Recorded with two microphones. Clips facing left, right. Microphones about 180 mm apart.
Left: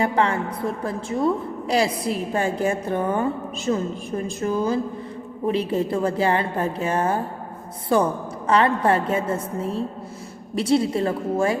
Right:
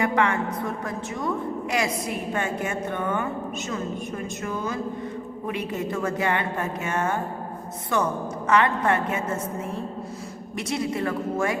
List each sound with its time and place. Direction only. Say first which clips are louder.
0.0 s a woman's voice: left 2 dB; 30° left (ahead or behind)